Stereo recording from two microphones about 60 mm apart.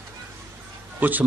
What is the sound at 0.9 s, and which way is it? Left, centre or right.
Speech, right.